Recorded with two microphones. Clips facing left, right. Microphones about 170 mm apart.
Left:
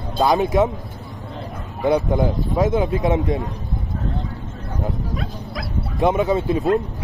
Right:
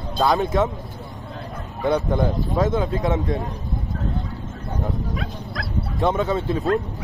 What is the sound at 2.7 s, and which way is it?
Speech, 15° left (ahead or behind).